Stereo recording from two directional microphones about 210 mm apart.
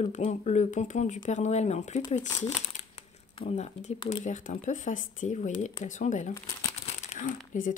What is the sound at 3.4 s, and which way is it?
Speech, 30° left (ahead or behind).